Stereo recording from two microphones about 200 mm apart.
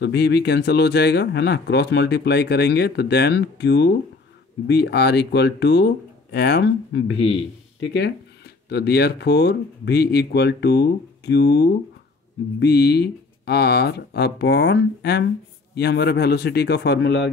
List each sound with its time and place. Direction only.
0.0 s speech: 55° left (ahead or behind)